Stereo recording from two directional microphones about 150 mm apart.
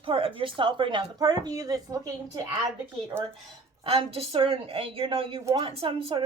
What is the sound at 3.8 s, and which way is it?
Speech, 40° right (ahead or behind).